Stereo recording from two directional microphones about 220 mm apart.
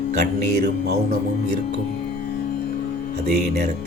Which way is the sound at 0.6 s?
45° right (ahead or behind).